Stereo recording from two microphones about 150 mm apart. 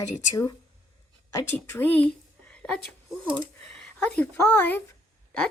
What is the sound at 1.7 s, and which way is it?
A woman's voice, 10° left (ahead or behind).